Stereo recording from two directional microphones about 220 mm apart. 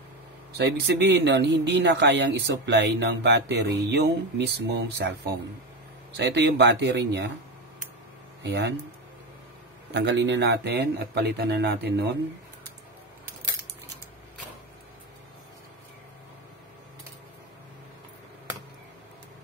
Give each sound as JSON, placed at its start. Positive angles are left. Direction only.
{"t": 0.6, "sound": "speech", "side_deg": -50}
{"t": 8.4, "sound": "speech", "side_deg": -50}
{"t": 9.9, "sound": "speech", "side_deg": -55}